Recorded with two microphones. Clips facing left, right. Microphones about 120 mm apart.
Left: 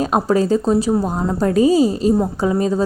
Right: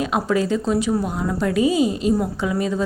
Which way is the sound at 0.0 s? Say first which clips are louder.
Left 4 dB; 40° left (ahead or behind).